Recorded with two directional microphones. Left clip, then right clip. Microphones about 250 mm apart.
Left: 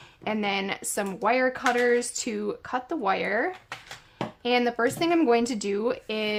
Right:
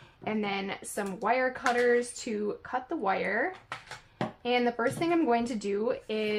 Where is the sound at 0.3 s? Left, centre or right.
Left.